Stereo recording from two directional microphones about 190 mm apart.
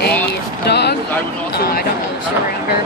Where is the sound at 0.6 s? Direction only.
60° left (ahead or behind).